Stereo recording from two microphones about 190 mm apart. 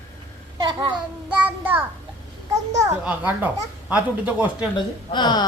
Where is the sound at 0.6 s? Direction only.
20° right (ahead or behind).